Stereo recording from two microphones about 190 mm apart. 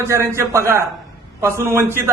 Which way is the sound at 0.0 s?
15° right (ahead or behind).